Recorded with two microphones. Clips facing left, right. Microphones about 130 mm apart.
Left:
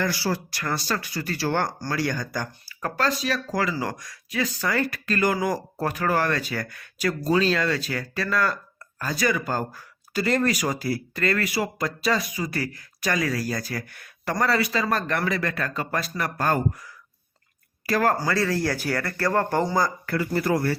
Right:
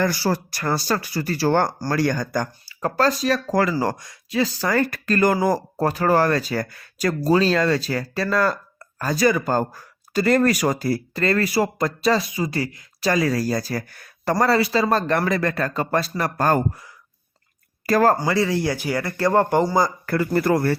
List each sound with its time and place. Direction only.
0.0 s speech: 40° right (ahead or behind)
2.6 s speech: 30° right (ahead or behind)
4.0 s speech: 25° right (ahead or behind)
12.2 s speech: 25° right (ahead or behind)
17.8 s speech: 40° right (ahead or behind)
18.2 s speech: 15° right (ahead or behind)
20.1 s speech: 45° right (ahead or behind)